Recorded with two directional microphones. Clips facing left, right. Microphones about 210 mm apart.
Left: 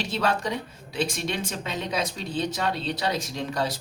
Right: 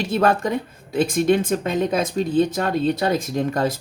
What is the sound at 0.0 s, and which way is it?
A woman's voice, 50° right (ahead or behind).